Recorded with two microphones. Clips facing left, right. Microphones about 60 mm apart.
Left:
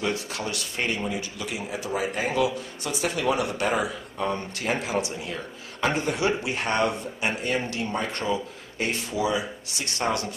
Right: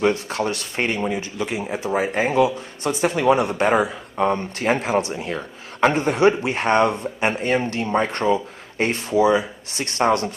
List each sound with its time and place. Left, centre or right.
0.0 s speech: right